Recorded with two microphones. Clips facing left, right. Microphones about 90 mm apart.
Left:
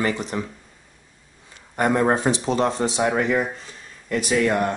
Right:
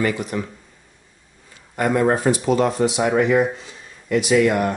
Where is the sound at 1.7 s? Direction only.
25° left (ahead or behind).